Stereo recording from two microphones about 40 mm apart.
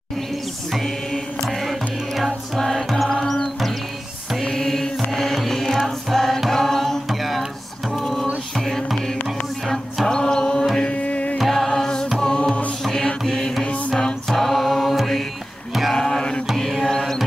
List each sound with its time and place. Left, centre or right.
1.6 s music: centre
7.1 s music: centre
8.6 s music: centre
10.0 s music: centre
10.9 s music: left
11.3 s music: centre
12.8 s mantra: centre
13.3 s music: centre
14.3 s mantra: centre
15.9 s music: centre
16.5 s mantra: centre
16.9 s music: centre